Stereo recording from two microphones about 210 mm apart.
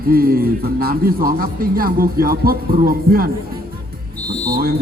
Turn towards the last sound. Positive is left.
turn(degrees=-45)  # may be behind; listen again after turning